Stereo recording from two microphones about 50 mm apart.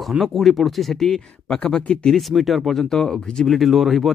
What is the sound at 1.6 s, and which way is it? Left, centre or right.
Speech, left.